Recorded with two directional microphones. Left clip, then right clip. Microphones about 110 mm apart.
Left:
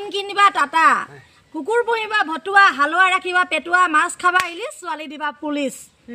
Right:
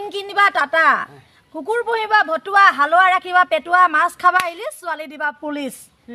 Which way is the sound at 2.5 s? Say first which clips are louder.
Right 1 dB; 60° right (ahead or behind).